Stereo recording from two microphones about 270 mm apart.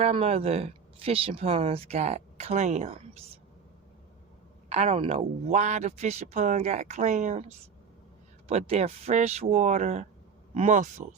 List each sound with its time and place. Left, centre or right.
0.0 s speech: right
4.7 s speech: right